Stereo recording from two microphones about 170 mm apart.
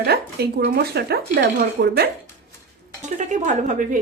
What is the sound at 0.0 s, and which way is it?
Speech, 70° right (ahead or behind).